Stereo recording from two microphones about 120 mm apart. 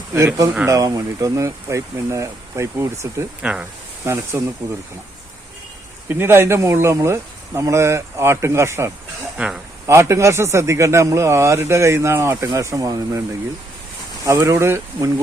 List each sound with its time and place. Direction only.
0.7 s speech: 30° right (ahead or behind)
3.4 s speech: 10° right (ahead or behind)
4.0 s speech: 25° right (ahead or behind)
6.1 s speech: 20° right (ahead or behind)
9.4 s speech: 10° right (ahead or behind)
9.8 s speech: 25° right (ahead or behind)
14.3 s speech: 25° right (ahead or behind)